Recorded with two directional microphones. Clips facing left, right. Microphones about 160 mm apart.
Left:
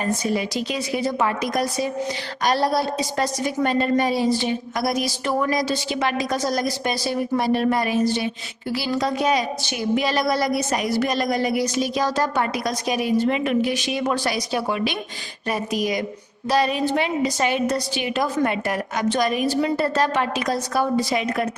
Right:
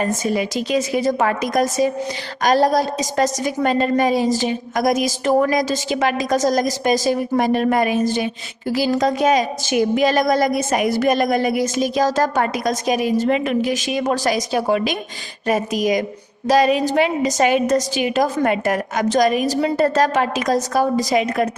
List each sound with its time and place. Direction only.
0.1 s a woman's voice: 45° right (ahead or behind)
16.8 s a woman's voice: 45° right (ahead or behind)